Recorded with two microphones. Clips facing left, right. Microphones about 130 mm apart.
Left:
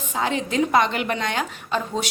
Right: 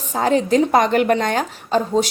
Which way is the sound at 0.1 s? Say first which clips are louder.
Right 8 dB; 40° right (ahead or behind).